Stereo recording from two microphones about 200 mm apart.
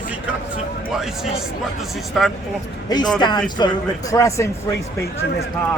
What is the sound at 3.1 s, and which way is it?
Speech, 20° left (ahead or behind).